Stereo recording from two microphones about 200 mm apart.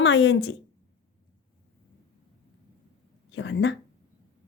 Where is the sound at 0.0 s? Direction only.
65° left (ahead or behind).